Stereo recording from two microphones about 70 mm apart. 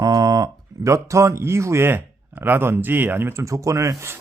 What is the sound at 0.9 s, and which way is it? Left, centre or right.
A man's voice, right.